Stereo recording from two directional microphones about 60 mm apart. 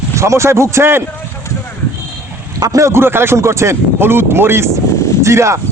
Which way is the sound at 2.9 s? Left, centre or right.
Right.